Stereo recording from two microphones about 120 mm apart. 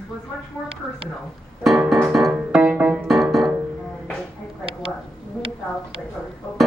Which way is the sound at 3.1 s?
Centre (ahead or behind).